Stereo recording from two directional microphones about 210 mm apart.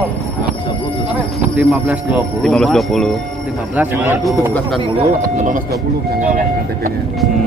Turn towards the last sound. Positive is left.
turn(degrees=-40)  # may be behind; listen again after turning